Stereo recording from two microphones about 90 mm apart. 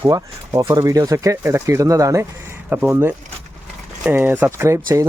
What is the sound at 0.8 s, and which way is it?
Speech, 40° right (ahead or behind).